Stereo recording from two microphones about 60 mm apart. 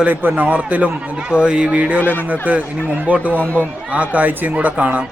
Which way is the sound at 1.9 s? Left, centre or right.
Left.